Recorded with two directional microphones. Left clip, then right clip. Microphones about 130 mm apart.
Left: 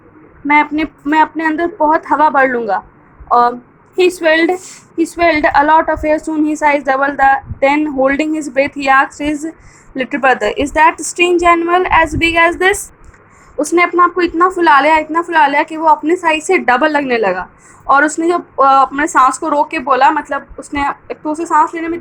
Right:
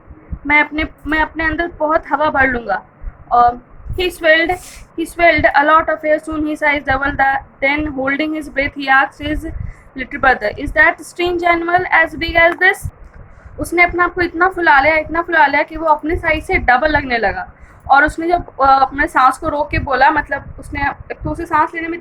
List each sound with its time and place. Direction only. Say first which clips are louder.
0.4 s a woman's voice: left 2 dB; 30° left (ahead or behind)